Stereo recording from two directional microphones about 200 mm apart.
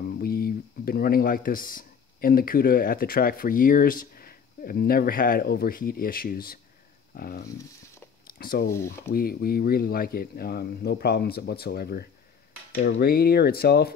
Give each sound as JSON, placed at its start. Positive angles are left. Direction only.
{"t": 0.2, "sound": "speech", "side_deg": 50}